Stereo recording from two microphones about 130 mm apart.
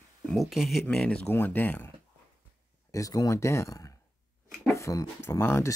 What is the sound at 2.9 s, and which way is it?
Speech, 25° left (ahead or behind).